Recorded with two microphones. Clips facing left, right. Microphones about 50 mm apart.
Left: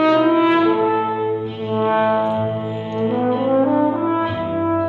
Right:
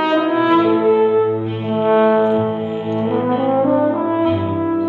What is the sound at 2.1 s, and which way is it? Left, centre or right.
Brass instrument, centre.